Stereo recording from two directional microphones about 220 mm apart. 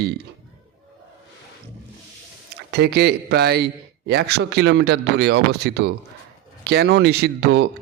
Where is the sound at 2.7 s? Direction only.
50° right (ahead or behind).